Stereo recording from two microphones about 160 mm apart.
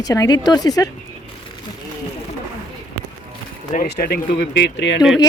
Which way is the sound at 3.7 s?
70° left (ahead or behind).